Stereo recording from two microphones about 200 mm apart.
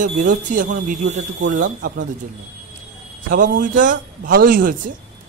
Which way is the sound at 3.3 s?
40° right (ahead or behind).